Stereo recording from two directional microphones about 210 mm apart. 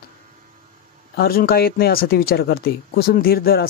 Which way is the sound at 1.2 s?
45° left (ahead or behind).